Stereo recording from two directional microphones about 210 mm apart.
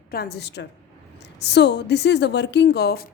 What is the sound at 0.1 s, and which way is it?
A woman's voice, 50° left (ahead or behind).